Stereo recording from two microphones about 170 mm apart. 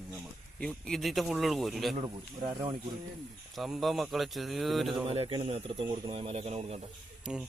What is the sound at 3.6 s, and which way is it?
Speech, centre (ahead or behind).